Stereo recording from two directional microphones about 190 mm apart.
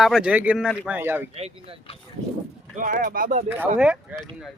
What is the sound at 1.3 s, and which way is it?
Speech, 35° right (ahead or behind).